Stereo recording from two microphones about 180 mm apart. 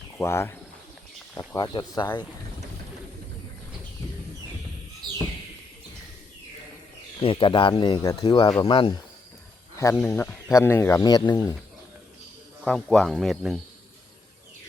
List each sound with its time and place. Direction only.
0.2 s speech: 15° left (ahead or behind)
5.0 s a sound: 25° right (ahead or behind)
7.2 s speech: 30° left (ahead or behind)
9.7 s speech: 15° left (ahead or behind)
12.6 s speech: 5° left (ahead or behind)